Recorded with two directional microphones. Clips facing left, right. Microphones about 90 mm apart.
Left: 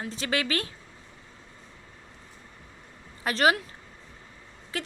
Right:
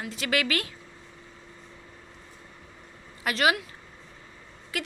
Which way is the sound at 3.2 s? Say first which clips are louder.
Left 1 dB; 35° left (ahead or behind).